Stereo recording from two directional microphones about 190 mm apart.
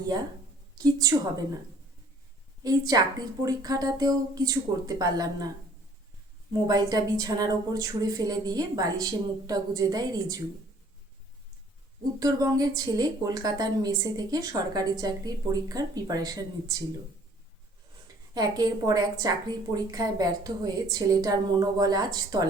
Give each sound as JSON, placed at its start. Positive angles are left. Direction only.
{"t": 0.8, "sound": "a woman's voice", "side_deg": -20}
{"t": 2.6, "sound": "a woman's voice", "side_deg": -20}
{"t": 6.5, "sound": "a woman's voice", "side_deg": -20}
{"t": 12.2, "sound": "a woman's voice", "side_deg": -20}
{"t": 18.3, "sound": "a woman's voice", "side_deg": -20}